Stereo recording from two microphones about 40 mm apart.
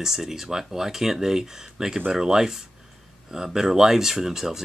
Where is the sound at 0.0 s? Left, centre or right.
Centre.